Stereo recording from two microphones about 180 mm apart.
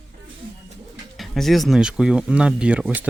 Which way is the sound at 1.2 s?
Centre (ahead or behind).